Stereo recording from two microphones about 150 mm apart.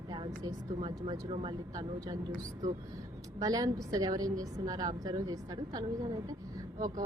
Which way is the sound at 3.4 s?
25° right (ahead or behind).